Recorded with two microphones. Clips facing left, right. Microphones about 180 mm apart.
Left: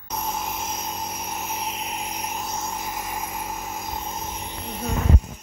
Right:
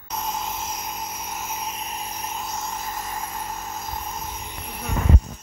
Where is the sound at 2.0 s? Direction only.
15° left (ahead or behind).